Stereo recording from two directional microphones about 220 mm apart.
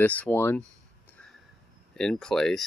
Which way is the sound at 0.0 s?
5° left (ahead or behind).